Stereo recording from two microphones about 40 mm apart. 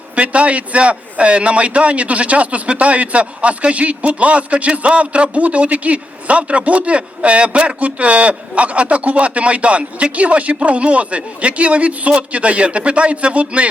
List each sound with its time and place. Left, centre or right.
0.2 s a man's voice: right